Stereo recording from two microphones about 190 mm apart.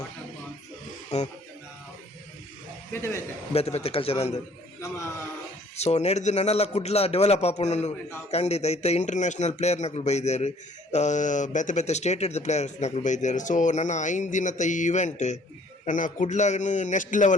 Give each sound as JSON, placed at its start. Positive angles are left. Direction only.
{"t": 1.1, "sound": "speech", "side_deg": 35}
{"t": 2.9, "sound": "a man's voice", "side_deg": 15}
{"t": 3.5, "sound": "speech", "side_deg": 35}
{"t": 5.7, "sound": "speech", "side_deg": 35}